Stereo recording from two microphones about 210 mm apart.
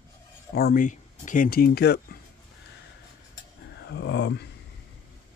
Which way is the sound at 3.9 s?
55° left (ahead or behind).